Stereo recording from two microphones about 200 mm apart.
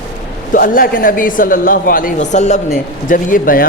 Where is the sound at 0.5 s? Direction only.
45° left (ahead or behind).